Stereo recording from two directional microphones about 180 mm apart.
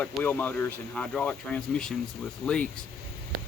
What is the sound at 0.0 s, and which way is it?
Speech, 10° left (ahead or behind).